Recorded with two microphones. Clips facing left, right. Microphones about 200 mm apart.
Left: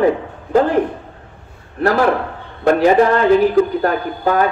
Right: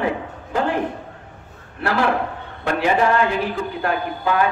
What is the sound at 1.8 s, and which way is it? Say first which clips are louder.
A man's voice: left 5 dB; 40° left (ahead or behind).